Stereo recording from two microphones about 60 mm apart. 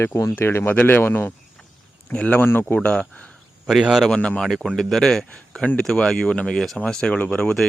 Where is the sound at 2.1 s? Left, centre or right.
Left.